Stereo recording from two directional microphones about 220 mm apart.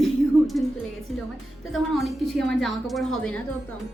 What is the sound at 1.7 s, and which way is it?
A woman's voice, centre (ahead or behind).